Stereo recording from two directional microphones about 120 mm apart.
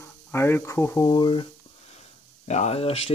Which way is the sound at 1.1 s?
40° left (ahead or behind).